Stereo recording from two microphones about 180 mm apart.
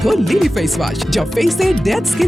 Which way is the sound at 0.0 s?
Centre (ahead or behind).